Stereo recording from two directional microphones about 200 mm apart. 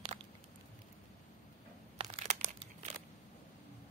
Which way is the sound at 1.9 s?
35° right (ahead or behind).